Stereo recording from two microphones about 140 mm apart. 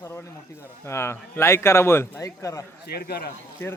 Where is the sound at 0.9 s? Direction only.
20° left (ahead or behind).